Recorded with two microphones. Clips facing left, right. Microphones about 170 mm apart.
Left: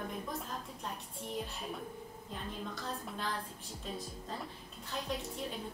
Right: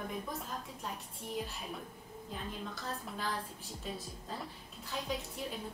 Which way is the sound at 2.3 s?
Centre (ahead or behind).